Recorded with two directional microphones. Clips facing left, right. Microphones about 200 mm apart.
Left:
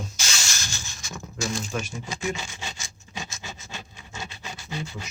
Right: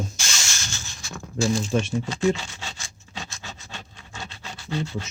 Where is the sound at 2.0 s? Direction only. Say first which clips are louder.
Right 8 dB; 10° left (ahead or behind).